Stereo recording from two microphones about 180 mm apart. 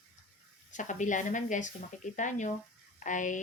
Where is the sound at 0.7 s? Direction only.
45° left (ahead or behind).